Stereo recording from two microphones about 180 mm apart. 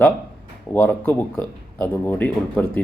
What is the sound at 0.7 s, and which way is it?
Speech, 10° left (ahead or behind).